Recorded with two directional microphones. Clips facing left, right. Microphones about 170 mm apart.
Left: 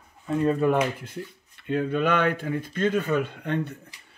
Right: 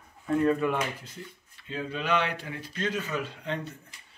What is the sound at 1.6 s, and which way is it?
Speech, 55° left (ahead or behind).